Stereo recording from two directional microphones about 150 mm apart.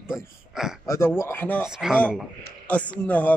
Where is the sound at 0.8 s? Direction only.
20° left (ahead or behind).